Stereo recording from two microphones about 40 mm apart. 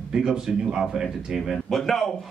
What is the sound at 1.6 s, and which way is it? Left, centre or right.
Speech, centre.